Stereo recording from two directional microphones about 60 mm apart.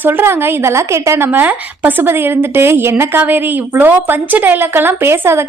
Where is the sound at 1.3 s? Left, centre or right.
Right.